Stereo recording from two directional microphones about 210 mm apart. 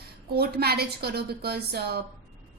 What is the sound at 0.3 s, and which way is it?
A woman's voice, 50° right (ahead or behind).